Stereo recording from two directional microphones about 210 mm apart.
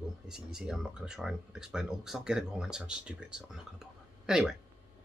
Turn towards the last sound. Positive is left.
turn(degrees=-5)  # may be behind; listen again after turning